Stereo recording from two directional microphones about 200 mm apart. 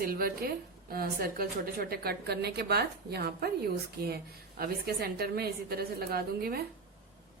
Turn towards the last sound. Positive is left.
turn(degrees=-50)  # may be behind; listen again after turning